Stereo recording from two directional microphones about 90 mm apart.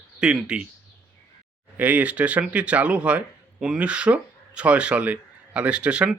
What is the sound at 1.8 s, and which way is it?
Speech, 15° right (ahead or behind).